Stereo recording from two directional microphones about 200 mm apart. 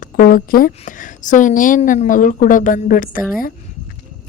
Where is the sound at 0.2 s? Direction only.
45° left (ahead or behind).